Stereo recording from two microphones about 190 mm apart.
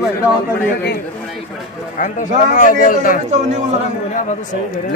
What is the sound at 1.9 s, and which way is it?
A man's voice, 40° left (ahead or behind).